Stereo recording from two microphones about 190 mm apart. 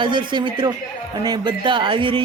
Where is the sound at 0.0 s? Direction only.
25° right (ahead or behind).